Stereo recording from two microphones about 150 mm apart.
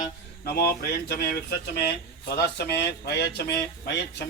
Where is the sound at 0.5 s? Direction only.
90° left.